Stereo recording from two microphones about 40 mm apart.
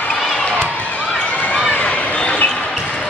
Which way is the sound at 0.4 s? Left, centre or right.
Left.